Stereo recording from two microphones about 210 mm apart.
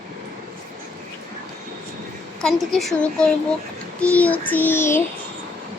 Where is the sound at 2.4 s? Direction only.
Centre (ahead or behind).